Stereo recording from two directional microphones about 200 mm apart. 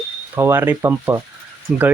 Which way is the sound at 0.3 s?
10° right (ahead or behind).